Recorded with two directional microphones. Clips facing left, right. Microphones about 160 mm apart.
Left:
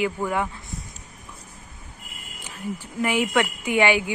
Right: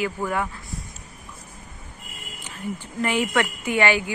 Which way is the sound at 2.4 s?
10° left (ahead or behind).